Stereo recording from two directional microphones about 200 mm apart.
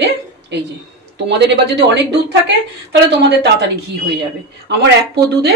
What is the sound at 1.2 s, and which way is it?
Speech, 60° right (ahead or behind).